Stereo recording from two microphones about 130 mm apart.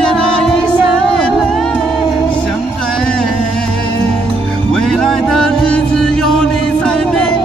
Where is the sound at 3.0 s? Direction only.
5° left (ahead or behind).